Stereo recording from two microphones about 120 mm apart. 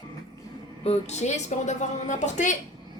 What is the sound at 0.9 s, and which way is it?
A woman's voice, 65° left (ahead or behind).